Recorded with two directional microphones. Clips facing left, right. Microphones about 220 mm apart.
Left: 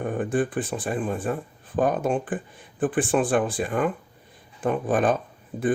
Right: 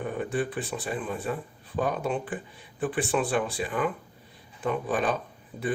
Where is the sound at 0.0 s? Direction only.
50° left (ahead or behind).